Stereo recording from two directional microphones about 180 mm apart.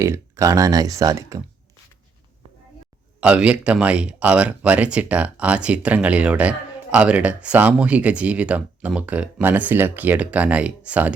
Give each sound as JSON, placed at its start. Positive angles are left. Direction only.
{"t": 0.0, "sound": "speech", "side_deg": -15}
{"t": 3.2, "sound": "speech", "side_deg": -5}